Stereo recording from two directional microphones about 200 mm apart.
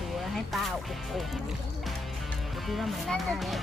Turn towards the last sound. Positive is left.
turn(degrees=0)  # may be behind; listen again after turning